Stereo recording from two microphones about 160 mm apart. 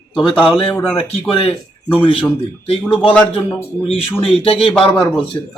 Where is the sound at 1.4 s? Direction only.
35° left (ahead or behind).